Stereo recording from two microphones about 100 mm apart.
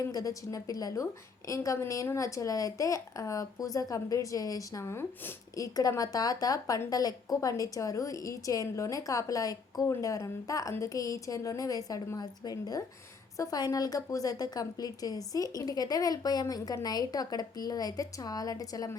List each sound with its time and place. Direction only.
0.0 s speech: 35° left (ahead or behind)